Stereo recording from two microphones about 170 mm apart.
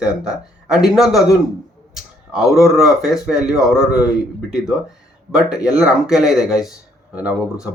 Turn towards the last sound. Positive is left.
turn(degrees=-5)  # may be behind; listen again after turning